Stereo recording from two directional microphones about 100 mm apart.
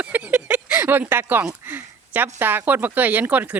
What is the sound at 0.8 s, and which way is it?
Speech, 20° right (ahead or behind).